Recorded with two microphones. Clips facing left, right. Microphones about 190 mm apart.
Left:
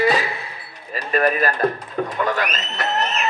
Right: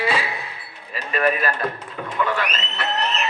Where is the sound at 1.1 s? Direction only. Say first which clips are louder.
Left 3 dB; 40° left (ahead or behind).